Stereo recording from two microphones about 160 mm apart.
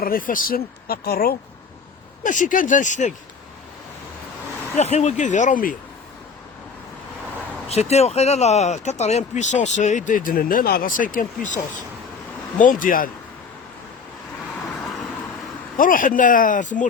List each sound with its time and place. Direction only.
0.0 s speech: 60° left (ahead or behind)
2.2 s speech: 55° left (ahead or behind)
4.8 s speech: 45° left (ahead or behind)
7.7 s speech: 40° left (ahead or behind); by 13.1 s 60° left (ahead or behind)
15.8 s speech: 60° left (ahead or behind)